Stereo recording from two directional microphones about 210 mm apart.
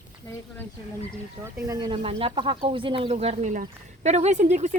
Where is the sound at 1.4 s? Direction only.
15° right (ahead or behind); by 4.7 s 35° right (ahead or behind).